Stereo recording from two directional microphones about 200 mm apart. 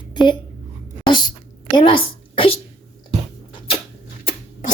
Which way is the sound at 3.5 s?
25° left (ahead or behind).